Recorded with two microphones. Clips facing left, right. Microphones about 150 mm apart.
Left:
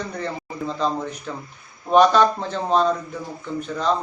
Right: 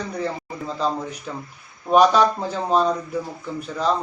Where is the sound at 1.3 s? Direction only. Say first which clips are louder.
Even; 5° right (ahead or behind).